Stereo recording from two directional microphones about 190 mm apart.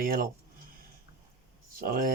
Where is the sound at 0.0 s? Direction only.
50° right (ahead or behind).